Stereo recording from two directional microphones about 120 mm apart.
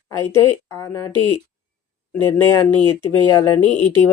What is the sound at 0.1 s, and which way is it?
Speech, 40° right (ahead or behind).